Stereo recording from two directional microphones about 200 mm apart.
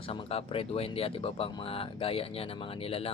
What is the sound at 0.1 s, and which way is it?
Speech, 30° left (ahead or behind).